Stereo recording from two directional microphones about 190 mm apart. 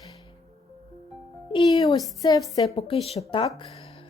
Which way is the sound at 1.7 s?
20° left (ahead or behind).